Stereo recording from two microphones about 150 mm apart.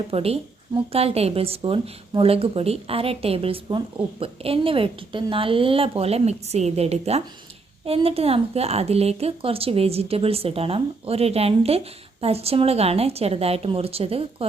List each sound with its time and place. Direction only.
0.1 s a woman's voice: 40° right (ahead or behind)